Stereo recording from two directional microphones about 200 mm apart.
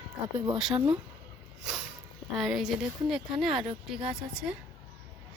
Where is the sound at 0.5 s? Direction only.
5° right (ahead or behind).